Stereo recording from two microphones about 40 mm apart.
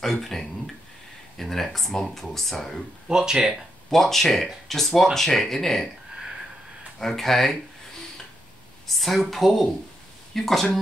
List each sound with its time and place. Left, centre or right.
0.0 s speech: centre
3.1 s speech: centre
3.9 s speech: centre
7.0 s speech: centre
8.8 s a woman's voice: centre